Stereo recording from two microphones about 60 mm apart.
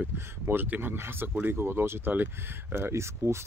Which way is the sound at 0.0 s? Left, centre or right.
Right.